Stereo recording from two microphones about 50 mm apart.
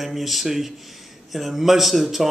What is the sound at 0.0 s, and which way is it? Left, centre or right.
Speech, centre.